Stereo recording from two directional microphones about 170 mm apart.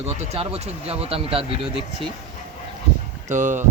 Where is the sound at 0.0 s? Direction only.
40° right (ahead or behind).